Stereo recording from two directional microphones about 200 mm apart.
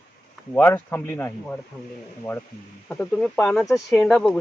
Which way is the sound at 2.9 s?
5° left (ahead or behind).